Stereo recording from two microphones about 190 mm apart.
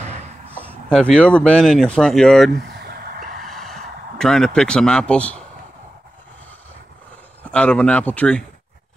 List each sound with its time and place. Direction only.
0.8 s speech: 5° left (ahead or behind)
2.5 s vehicle: 55° right (ahead or behind)
3.4 s a sound: centre (ahead or behind)
7.5 s speech: 5° left (ahead or behind)